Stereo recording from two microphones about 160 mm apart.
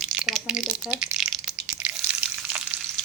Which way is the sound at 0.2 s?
5° right (ahead or behind).